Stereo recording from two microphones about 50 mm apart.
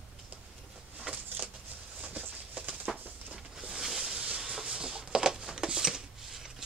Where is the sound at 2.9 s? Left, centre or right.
Centre.